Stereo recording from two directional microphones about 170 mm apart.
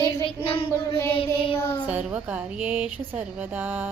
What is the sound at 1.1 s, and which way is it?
Child singing, 30° left (ahead or behind).